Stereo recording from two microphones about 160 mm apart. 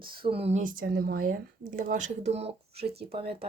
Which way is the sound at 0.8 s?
65° right (ahead or behind).